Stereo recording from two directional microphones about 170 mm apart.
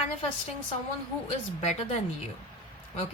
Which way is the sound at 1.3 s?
35° left (ahead or behind).